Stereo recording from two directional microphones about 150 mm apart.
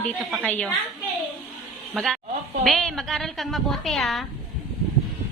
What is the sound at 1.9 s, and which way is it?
A woman's voice, centre (ahead or behind).